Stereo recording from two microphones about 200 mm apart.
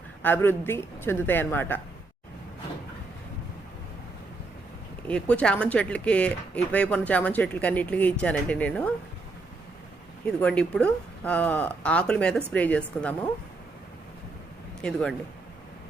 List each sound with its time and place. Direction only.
0.2 s speech: 10° left (ahead or behind)
5.0 s speech: 5° left (ahead or behind)
10.4 s speech: 5° left (ahead or behind)
14.8 s speech: 5° left (ahead or behind)